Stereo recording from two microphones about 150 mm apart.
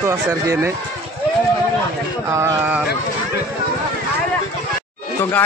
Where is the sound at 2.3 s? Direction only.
15° right (ahead or behind).